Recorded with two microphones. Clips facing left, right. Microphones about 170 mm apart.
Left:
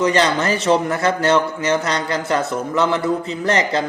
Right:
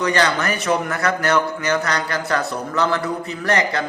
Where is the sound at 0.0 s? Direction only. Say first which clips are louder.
Left 3 dB; 25° left (ahead or behind).